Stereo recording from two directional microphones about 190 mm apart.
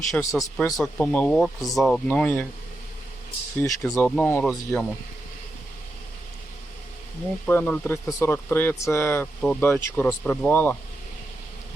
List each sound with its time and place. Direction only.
0.1 s speech: 15° left (ahead or behind)
3.6 s speech: 15° left (ahead or behind)
7.4 s speech: 10° left (ahead or behind)